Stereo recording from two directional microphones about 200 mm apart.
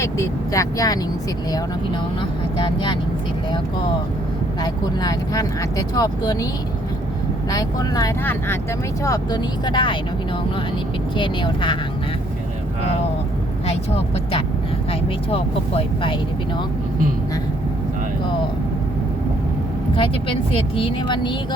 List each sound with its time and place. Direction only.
0.0 s speech: 15° left (ahead or behind)
2.6 s speech: 20° left (ahead or behind)
4.6 s speech: 20° left (ahead or behind)
7.5 s speech: 20° left (ahead or behind)
11.2 s speech: 25° left (ahead or behind)
15.3 s speech: 25° left (ahead or behind)
20.0 s speech: 25° left (ahead or behind)